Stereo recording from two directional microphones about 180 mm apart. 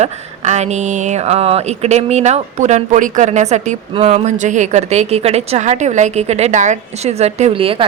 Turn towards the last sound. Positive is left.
turn(degrees=-30)  # may be behind; listen again after turning